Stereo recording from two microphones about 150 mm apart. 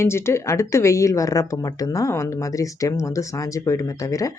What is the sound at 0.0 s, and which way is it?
A woman's voice, 15° left (ahead or behind).